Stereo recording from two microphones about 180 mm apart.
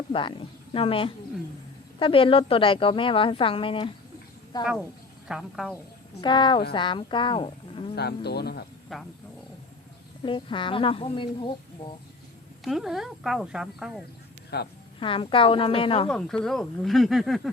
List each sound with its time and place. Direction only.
0.1 s a woman's voice: 30° left (ahead or behind)
5.3 s speech: centre (ahead or behind)
6.2 s a woman's voice: 25° left (ahead or behind)
7.9 s speech: 65° left (ahead or behind)
8.9 s speech: centre (ahead or behind)
10.2 s a woman's voice: 25° left (ahead or behind)
12.6 s speech: centre (ahead or behind)
14.5 s speech: 65° left (ahead or behind)
14.9 s a woman's voice: 30° left (ahead or behind)
16.0 s speech: 5° left (ahead or behind)